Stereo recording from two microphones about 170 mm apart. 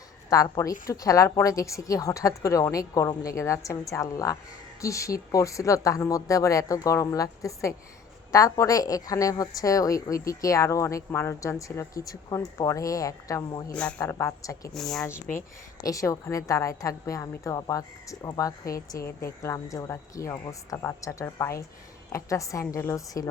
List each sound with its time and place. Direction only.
0.3 s a woman's voice: 20° left (ahead or behind)
13.7 s a woman's voice: 10° left (ahead or behind)
14.7 s speech: centre (ahead or behind)
15.0 s a woman's voice: 15° left (ahead or behind)